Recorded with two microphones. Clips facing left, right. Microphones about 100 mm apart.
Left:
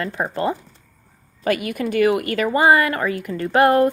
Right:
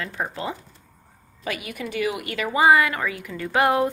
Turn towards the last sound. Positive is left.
turn(degrees=50)  # may be behind; listen again after turning